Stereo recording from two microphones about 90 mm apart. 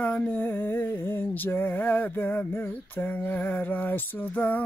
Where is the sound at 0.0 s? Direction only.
15° left (ahead or behind).